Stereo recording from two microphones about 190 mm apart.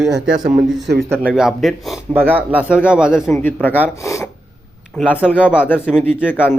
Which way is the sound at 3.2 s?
10° left (ahead or behind).